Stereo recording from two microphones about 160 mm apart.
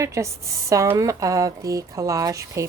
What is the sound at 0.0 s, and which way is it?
Speech, 20° right (ahead or behind).